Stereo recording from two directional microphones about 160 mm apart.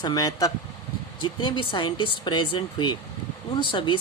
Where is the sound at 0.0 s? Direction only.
25° left (ahead or behind).